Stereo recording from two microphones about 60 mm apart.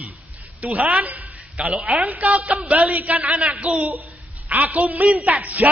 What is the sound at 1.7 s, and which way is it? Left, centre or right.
A man's voice, centre.